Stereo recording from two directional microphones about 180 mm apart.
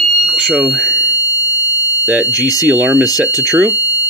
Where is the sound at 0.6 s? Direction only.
Centre (ahead or behind).